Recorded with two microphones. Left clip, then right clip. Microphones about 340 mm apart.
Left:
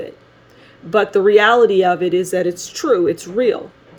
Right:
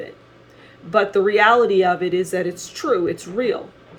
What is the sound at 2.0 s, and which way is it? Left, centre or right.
Speech, left.